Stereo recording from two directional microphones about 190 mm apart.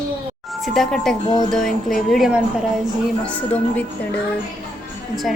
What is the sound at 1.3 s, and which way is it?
Speech, 20° left (ahead or behind).